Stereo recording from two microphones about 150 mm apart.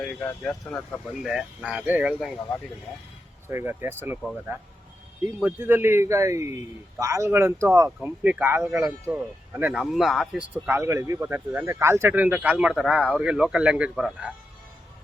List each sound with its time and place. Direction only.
0.0 s speech: 5° left (ahead or behind)
1.2 s speech: centre (ahead or behind)
3.5 s speech: 15° right (ahead or behind)
5.4 s speech: 10° right (ahead or behind)
9.8 s speech: centre (ahead or behind)
10.5 s speech: 15° right (ahead or behind)